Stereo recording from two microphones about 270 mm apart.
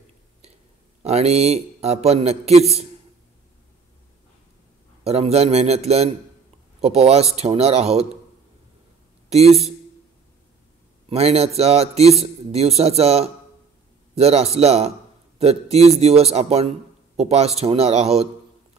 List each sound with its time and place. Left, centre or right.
1.0 s speech: right
5.0 s speech: right
9.3 s speech: right
11.1 s speech: right